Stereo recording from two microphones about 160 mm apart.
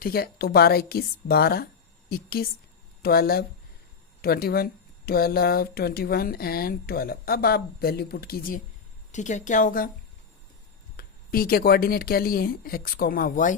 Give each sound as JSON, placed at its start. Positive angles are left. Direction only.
{"t": 0.0, "sound": "speech", "side_deg": 70}
{"t": 9.1, "sound": "speech", "side_deg": 50}
{"t": 10.9, "sound": "speech", "side_deg": 65}